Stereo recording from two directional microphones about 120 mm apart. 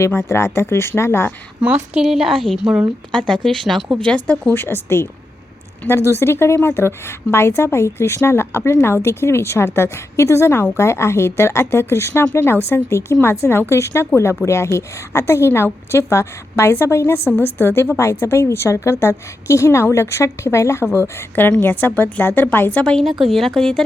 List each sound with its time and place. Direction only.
0.0 s a woman's voice: 20° left (ahead or behind)
2.0 s speech: 5° right (ahead or behind)
4.0 s a woman's voice: 10° left (ahead or behind)